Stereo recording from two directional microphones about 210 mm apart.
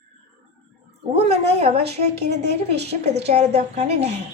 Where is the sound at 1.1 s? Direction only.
30° right (ahead or behind).